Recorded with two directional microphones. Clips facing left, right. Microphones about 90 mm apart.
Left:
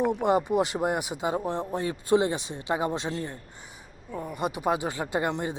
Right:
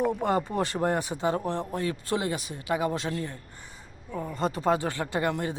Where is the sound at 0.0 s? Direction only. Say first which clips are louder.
Left 2 dB; 20° left (ahead or behind).